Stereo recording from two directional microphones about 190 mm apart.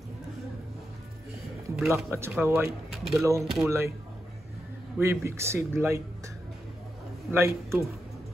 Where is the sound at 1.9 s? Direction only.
15° right (ahead or behind).